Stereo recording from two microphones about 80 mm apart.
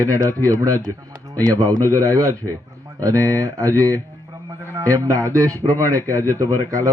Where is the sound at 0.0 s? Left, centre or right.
Right.